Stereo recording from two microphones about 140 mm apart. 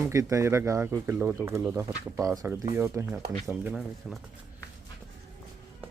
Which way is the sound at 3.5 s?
5° right (ahead or behind).